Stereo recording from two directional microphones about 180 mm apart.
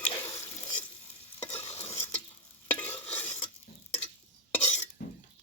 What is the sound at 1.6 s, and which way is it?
Stir, 35° left (ahead or behind).